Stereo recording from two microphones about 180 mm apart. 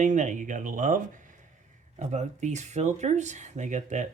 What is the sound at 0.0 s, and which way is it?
Speech, 40° right (ahead or behind).